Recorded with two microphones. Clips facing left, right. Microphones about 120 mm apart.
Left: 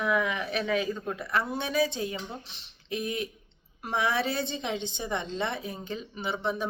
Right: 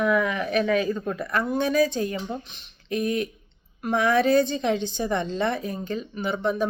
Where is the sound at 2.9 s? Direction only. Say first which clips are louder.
Right 7 dB; 25° left (ahead or behind).